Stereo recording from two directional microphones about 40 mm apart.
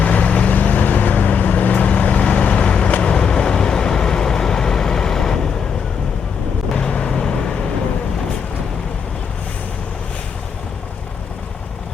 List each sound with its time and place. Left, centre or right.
0.0 s vehicle: left; by 5.4 s centre
6.7 s vehicle: left